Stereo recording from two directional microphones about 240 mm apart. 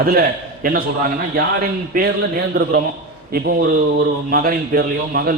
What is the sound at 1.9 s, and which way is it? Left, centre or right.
A man's voice, right.